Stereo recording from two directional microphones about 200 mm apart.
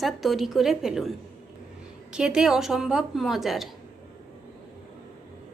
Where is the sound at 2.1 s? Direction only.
5° right (ahead or behind).